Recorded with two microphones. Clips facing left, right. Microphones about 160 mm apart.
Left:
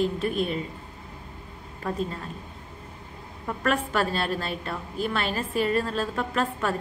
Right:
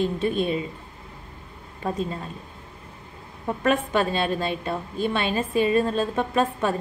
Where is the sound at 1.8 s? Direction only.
25° right (ahead or behind).